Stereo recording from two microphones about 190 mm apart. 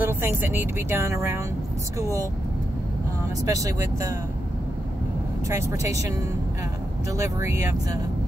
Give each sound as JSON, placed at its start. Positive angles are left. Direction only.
{"t": 0.0, "sound": "speech", "side_deg": -10}
{"t": 3.4, "sound": "speech", "side_deg": -15}
{"t": 5.5, "sound": "speech", "side_deg": -15}
{"t": 7.2, "sound": "speech", "side_deg": -15}